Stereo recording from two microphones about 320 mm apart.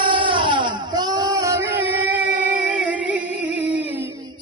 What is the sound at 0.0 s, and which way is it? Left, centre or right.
Music, centre.